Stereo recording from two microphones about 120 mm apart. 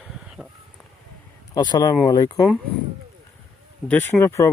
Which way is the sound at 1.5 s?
35° left (ahead or behind).